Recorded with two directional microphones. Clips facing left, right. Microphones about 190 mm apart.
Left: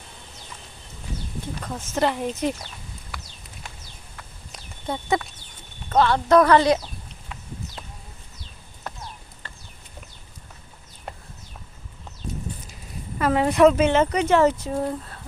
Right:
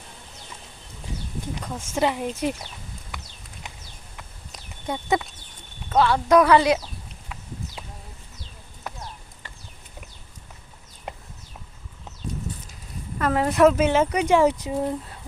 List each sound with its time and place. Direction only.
1.8 s speech: 10° right (ahead or behind)
3.1 s a sound: 20° right (ahead or behind)
4.9 s speech: 20° right (ahead or behind)
5.9 s speech: 5° right (ahead or behind)
8.9 s clip-clop: 10° right (ahead or behind)
11.1 s a sound: 20° right (ahead or behind)
13.1 s speech: centre (ahead or behind); by 15.2 s 15° right (ahead or behind)